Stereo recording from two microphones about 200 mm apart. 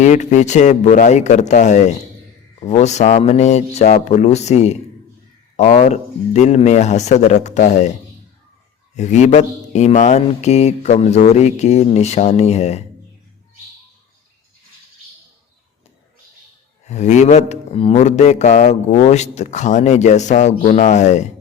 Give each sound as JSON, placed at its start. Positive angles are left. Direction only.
{"t": 0.0, "sound": "speech", "side_deg": 35}
{"t": 9.0, "sound": "speech", "side_deg": 35}
{"t": 16.9, "sound": "speech", "side_deg": 35}